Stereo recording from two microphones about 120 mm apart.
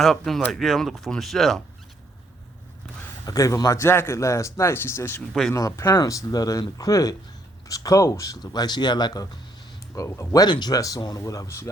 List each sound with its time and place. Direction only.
0.0 s speech: centre (ahead or behind)
3.2 s speech: 30° left (ahead or behind)
5.3 s speech: 5° left (ahead or behind)
5.5 s speech: 25° left (ahead or behind)